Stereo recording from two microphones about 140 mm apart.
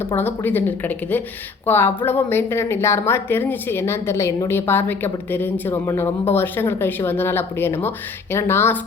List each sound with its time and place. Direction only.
0.2 s speech: 15° left (ahead or behind)